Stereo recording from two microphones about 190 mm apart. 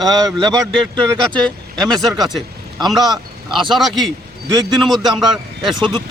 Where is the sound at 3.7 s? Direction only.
Centre (ahead or behind).